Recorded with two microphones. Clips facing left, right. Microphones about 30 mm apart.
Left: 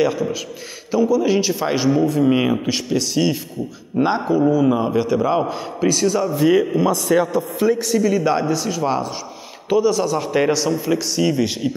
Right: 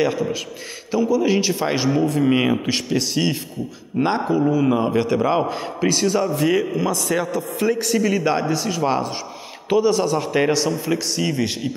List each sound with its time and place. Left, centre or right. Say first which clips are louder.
0.9 s a man's voice: left 2 dB; centre
4.9 s a man's voice: left 1 dB; right
5.4 s a man's voice: left 1 dB; centre
6.3 s speech: left 4 dB; centre
7.8 s a man's voice: left 2 dB; centre
10.1 s speech: left 1 dB; centre